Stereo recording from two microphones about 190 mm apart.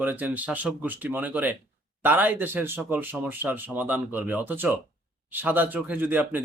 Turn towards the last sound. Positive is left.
turn(degrees=-10)  # may be behind; listen again after turning